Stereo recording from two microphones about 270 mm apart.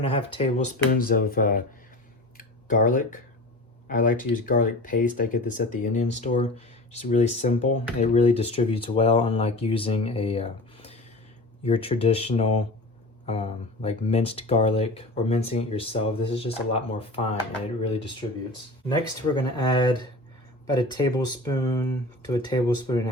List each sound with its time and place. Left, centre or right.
0.0 s speech: centre
2.6 s speech: left